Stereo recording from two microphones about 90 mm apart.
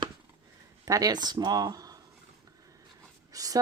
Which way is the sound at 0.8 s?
40° right (ahead or behind).